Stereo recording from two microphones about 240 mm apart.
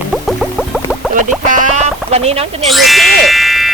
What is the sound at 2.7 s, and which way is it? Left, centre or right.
Speech, centre.